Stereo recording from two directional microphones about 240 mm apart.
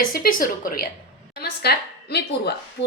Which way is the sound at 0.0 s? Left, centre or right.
Left.